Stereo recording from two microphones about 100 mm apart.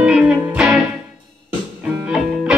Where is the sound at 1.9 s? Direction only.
10° right (ahead or behind).